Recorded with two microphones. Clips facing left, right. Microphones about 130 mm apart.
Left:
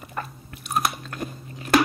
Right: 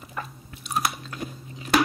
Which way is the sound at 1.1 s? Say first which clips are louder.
Left 2 dB; 50° left (ahead or behind).